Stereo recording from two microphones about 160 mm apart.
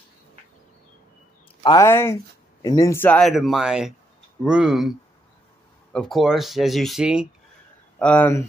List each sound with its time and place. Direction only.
1.6 s speech: 30° left (ahead or behind)
1.9 s speech: 15° left (ahead or behind); by 4.9 s 5° right (ahead or behind)
5.9 s speech: centre (ahead or behind)
8.0 s speech: 10° left (ahead or behind)